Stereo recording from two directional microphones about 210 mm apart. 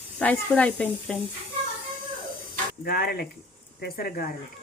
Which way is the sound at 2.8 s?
50° left (ahead or behind).